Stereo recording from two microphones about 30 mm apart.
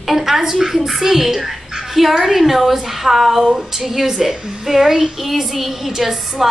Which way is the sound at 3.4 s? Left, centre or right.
Centre.